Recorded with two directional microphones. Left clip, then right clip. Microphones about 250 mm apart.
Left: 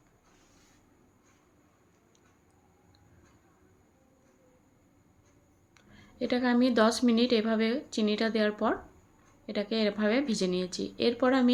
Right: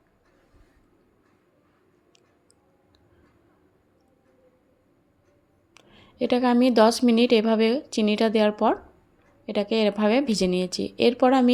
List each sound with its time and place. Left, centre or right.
5.7 s speech: right